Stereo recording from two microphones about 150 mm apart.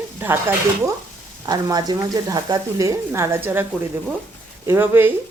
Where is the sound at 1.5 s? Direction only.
25° right (ahead or behind).